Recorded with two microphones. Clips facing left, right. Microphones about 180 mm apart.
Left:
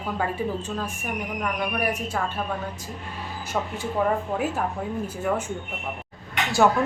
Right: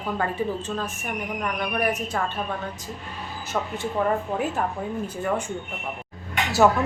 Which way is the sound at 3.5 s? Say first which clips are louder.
Even; 10° left (ahead or behind).